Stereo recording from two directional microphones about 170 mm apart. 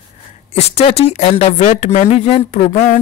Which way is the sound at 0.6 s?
35° left (ahead or behind).